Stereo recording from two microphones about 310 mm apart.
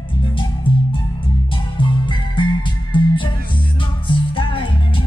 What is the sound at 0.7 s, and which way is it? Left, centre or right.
Music, centre.